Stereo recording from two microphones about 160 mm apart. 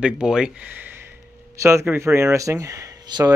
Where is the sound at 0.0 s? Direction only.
5° right (ahead or behind).